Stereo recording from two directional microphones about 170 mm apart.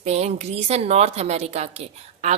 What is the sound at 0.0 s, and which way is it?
A woman's voice, 40° right (ahead or behind).